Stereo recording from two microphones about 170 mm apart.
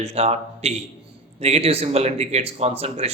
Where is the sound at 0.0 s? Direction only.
40° right (ahead or behind).